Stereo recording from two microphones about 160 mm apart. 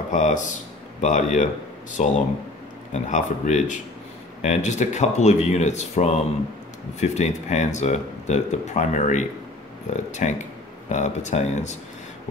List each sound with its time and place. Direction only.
0.1 s speech: 50° left (ahead or behind)